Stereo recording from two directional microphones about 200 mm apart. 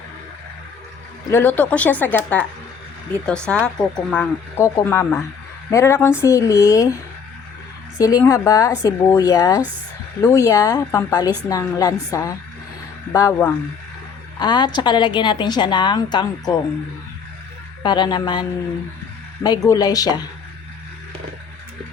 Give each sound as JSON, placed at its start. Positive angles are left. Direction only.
{"t": 1.3, "sound": "speech", "side_deg": 10}
{"t": 7.9, "sound": "a woman's voice", "side_deg": 15}
{"t": 17.8, "sound": "a woman's voice", "side_deg": 20}